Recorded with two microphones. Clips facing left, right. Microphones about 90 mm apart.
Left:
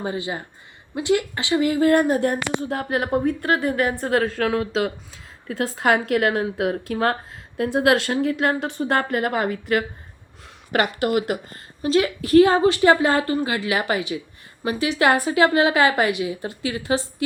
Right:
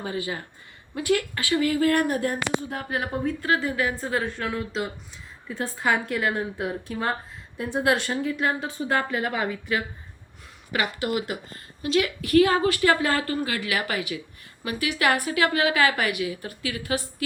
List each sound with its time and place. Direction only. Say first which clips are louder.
0.0 s a woman's voice: left 3 dB; 25° left (ahead or behind)
2.2 s a woman's voice: left 4 dB; 60° left (ahead or behind); by 4.9 s 90° left
5.5 s a woman's voice: left 5 dB; 80° left
8.1 s a woman's voice: left 5 dB; 60° left (ahead or behind)
11.0 s a woman's voice: left 6 dB; 60° left (ahead or behind)
11.8 s a woman's voice: left 4 dB; 30° left (ahead or behind)